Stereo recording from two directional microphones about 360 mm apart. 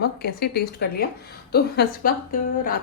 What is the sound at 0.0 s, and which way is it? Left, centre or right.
A woman's voice, left.